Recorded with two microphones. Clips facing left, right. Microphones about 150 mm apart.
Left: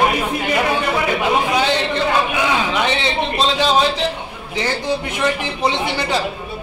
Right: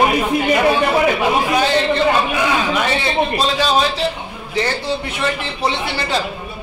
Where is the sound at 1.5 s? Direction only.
20° left (ahead or behind).